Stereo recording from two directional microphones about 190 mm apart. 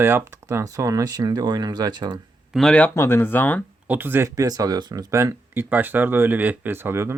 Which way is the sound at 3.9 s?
10° right (ahead or behind).